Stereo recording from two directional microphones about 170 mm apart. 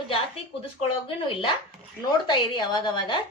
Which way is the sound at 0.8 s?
30° left (ahead or behind).